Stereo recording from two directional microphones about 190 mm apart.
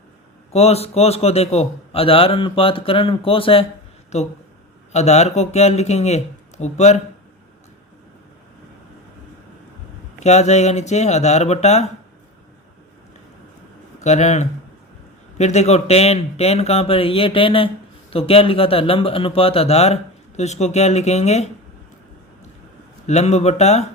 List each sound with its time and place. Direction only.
0.5 s a man's voice: 35° left (ahead or behind)
10.2 s a man's voice: 35° left (ahead or behind)
14.0 s a man's voice: 35° left (ahead or behind)
23.0 s a man's voice: 35° left (ahead or behind)